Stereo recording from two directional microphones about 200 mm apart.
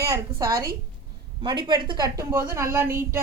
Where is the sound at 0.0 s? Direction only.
15° right (ahead or behind).